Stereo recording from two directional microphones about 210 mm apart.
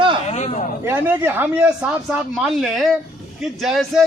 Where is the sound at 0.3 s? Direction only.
35° left (ahead or behind).